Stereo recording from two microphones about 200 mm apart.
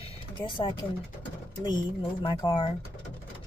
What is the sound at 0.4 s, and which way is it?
Speech, 25° left (ahead or behind).